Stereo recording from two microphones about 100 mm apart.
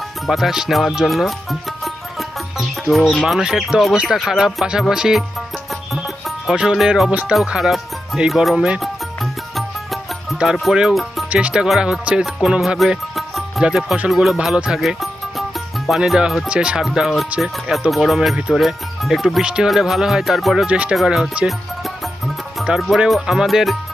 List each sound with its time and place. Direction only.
0.3 s music: 5° right (ahead or behind)
2.9 s speech: centre (ahead or behind)
5.9 s music: centre (ahead or behind)
7.1 s speech: 15° right (ahead or behind)
7.3 s speech: centre (ahead or behind)
9.6 s music: centre (ahead or behind)
14.1 s speech: 5° right (ahead or behind)
20.7 s speech: 15° right (ahead or behind)
20.9 s speech: centre (ahead or behind)
22.5 s speech: 5° right (ahead or behind)